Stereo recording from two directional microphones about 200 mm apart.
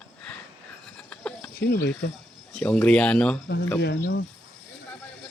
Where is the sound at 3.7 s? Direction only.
55° left (ahead or behind).